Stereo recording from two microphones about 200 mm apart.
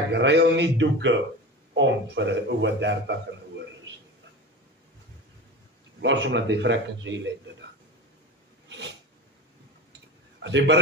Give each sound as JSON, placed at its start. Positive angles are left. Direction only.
{"t": 0.1, "sound": "speech", "side_deg": -60}
{"t": 5.9, "sound": "speech", "side_deg": -65}
{"t": 8.6, "sound": "a sound", "side_deg": -65}
{"t": 10.4, "sound": "speech", "side_deg": -60}